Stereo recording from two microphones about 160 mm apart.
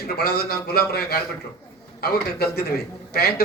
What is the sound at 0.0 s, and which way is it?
A man's voice, 80° left.